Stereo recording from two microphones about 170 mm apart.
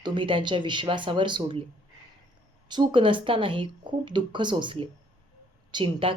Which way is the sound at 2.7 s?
30° right (ahead or behind).